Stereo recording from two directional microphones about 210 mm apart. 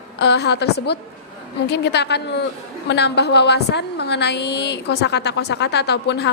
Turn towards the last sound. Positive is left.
turn(degrees=55)  # may be behind; listen again after turning